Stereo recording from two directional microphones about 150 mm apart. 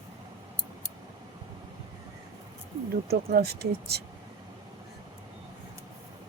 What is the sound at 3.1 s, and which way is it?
Speech, 90° right.